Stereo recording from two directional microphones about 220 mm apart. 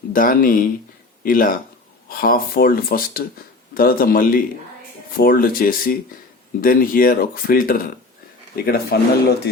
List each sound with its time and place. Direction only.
0.1 s speech: 40° left (ahead or behind)